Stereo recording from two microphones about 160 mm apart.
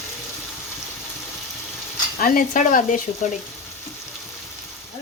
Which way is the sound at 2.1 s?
60° left (ahead or behind).